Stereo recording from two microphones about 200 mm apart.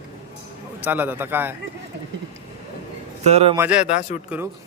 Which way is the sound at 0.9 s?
10° right (ahead or behind).